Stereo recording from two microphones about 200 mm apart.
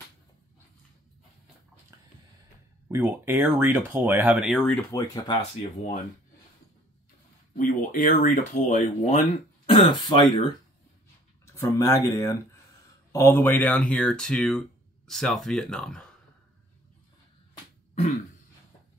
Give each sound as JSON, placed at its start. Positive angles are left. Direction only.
{"t": 2.9, "sound": "speech", "side_deg": -10}
{"t": 4.9, "sound": "speech", "side_deg": 20}
{"t": 7.5, "sound": "speech", "side_deg": 40}
{"t": 9.7, "sound": "speech", "side_deg": 25}
{"t": 11.4, "sound": "speech", "side_deg": 15}